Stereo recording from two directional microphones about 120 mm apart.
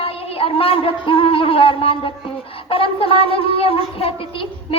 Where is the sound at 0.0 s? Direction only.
50° left (ahead or behind).